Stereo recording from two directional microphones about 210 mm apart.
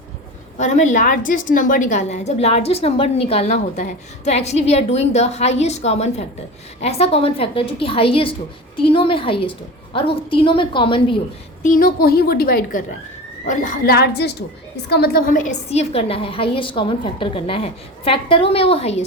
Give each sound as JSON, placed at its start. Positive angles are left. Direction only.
{"t": 0.6, "sound": "a woman's voice", "side_deg": 35}
{"t": 11.6, "sound": "a woman's voice", "side_deg": 40}